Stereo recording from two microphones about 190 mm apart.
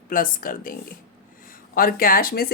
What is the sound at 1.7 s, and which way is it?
Speech, 50° left (ahead or behind).